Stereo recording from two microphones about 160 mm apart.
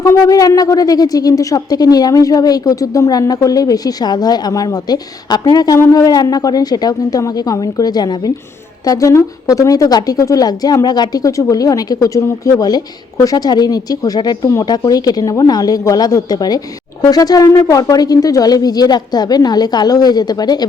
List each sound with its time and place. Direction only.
0.0 s speech: 20° left (ahead or behind)